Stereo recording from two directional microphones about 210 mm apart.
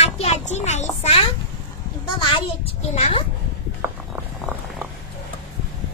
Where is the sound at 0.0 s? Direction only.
30° left (ahead or behind).